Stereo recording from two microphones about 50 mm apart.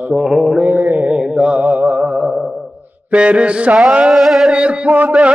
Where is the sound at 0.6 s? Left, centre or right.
Right.